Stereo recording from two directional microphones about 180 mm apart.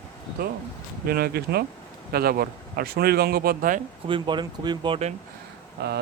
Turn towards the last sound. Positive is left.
turn(degrees=-65)  # may be behind; listen again after turning